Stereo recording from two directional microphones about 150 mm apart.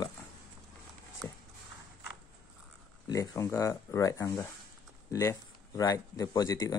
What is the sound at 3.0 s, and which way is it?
Speech, 20° left (ahead or behind).